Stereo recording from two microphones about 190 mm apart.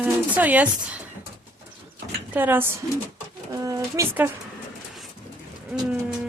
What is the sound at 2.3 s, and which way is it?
A woman's voice, 10° right (ahead or behind).